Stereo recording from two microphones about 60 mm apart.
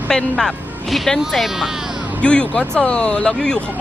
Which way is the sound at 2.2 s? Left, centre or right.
Centre.